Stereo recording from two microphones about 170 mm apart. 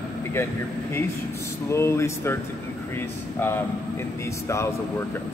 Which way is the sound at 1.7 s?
15° left (ahead or behind).